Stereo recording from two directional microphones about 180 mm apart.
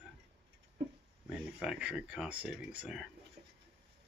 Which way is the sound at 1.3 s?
5° right (ahead or behind).